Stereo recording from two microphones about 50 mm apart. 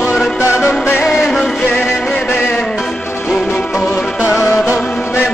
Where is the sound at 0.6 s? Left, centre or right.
Left.